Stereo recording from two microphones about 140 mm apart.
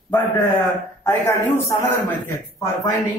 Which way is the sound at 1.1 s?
20° left (ahead or behind).